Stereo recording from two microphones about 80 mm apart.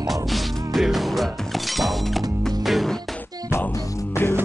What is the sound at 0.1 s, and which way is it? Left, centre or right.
Music, centre.